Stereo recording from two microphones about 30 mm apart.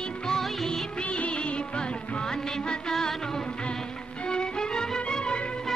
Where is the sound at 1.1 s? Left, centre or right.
Left.